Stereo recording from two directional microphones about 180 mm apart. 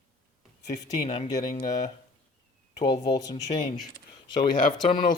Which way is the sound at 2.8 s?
25° left (ahead or behind).